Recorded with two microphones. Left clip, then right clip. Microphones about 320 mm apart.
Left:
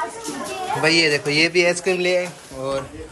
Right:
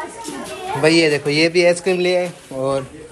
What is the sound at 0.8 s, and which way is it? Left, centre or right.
Speech, centre.